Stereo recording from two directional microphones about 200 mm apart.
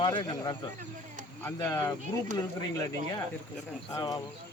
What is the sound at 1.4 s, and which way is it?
Speech, 10° left (ahead or behind).